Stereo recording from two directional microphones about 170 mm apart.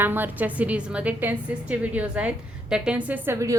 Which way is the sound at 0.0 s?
10° right (ahead or behind).